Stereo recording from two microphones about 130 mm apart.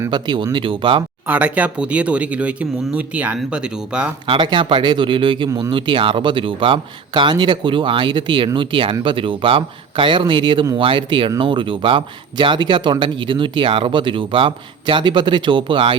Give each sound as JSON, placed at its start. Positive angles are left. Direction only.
{"t": 0.1, "sound": "speech", "side_deg": -35}
{"t": 1.3, "sound": "speech", "side_deg": -10}
{"t": 4.3, "sound": "speech", "side_deg": -40}